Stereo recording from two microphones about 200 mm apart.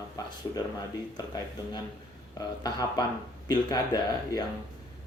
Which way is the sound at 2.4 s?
20° left (ahead or behind).